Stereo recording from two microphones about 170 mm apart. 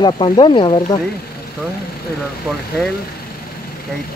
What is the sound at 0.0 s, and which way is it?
Speech, 30° left (ahead or behind).